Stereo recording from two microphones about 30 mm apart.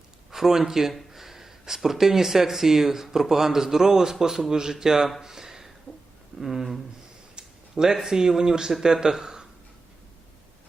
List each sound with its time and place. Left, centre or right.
0.3 s a man's voice: centre
5.2 s a sound: centre
6.4 s speech: centre